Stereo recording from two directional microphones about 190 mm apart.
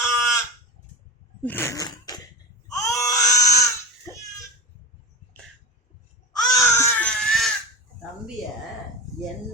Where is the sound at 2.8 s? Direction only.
15° left (ahead or behind).